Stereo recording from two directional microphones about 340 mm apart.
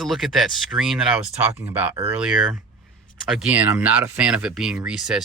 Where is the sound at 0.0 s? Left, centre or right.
Centre.